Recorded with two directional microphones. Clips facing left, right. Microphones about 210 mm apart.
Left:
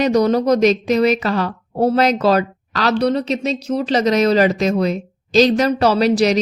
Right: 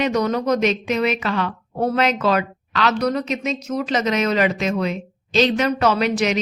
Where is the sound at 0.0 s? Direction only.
35° left (ahead or behind).